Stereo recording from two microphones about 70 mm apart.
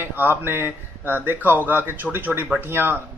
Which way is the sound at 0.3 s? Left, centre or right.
Right.